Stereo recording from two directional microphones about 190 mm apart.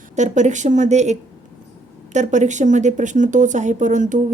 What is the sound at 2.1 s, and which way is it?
Speech, 40° right (ahead or behind).